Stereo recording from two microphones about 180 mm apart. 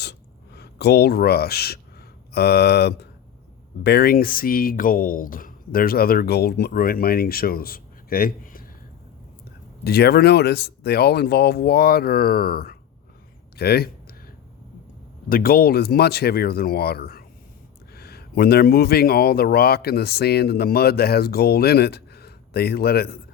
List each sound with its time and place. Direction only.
0.6 s speech: 65° left (ahead or behind)
9.8 s speech: 60° left (ahead or behind)
15.3 s speech: 55° left (ahead or behind)